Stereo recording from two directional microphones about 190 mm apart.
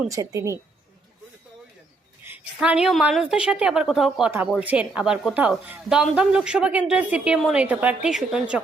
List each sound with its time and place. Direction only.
0.1 s a woman's voice: 15° right (ahead or behind)
2.2 s speech: 10° right (ahead or behind)